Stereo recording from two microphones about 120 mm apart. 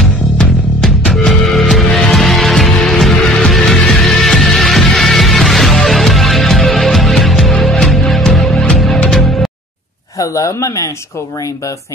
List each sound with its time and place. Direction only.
0.0 s music: 5° left (ahead or behind)
10.1 s speech: 25° left (ahead or behind)